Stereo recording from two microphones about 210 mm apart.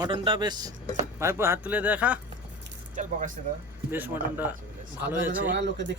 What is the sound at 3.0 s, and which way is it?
Speech, 35° right (ahead or behind).